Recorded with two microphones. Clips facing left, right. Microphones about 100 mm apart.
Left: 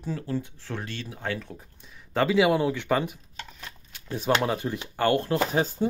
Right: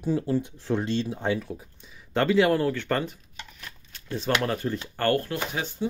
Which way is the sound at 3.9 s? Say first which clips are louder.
Right 1 dB; 15° left (ahead or behind).